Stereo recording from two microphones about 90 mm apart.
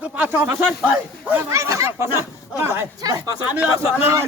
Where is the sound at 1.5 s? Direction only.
35° right (ahead or behind).